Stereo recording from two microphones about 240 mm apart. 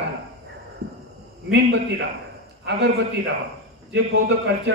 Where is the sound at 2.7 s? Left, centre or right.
Right.